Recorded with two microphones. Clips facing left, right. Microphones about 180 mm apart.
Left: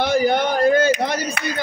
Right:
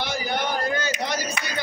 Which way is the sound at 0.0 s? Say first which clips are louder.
Left 9 dB; 55° left (ahead or behind).